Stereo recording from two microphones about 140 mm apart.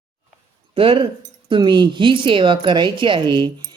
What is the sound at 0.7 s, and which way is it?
Speech, 40° right (ahead or behind).